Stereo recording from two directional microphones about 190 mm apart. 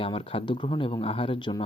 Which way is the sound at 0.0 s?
30° left (ahead or behind).